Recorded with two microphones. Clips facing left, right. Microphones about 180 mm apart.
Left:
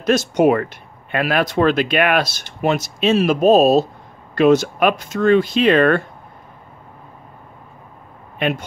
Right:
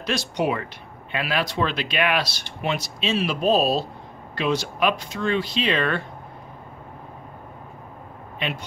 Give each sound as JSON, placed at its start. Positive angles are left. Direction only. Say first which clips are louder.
{"t": 0.0, "sound": "speech", "louder": "left 10 dB", "side_deg": 45}
{"t": 8.4, "sound": "speech", "louder": "left 9 dB", "side_deg": 50}